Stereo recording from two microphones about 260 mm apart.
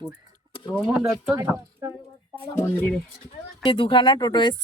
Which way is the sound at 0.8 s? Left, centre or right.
Centre.